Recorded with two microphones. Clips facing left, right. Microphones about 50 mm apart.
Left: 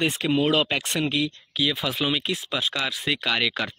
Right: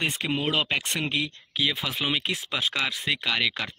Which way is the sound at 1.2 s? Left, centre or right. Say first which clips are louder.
Left 2 dB; right.